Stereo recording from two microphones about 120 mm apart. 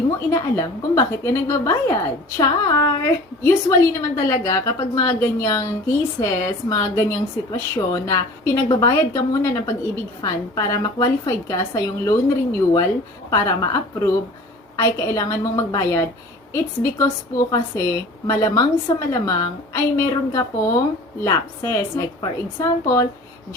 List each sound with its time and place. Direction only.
0.3 s a woman's voice: 25° left (ahead or behind)